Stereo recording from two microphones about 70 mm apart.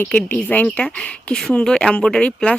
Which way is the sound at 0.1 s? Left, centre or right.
Left.